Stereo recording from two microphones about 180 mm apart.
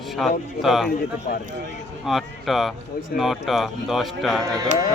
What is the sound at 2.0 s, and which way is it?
Speech, centre (ahead or behind).